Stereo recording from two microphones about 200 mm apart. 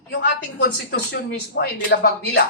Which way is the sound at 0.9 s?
55° left (ahead or behind).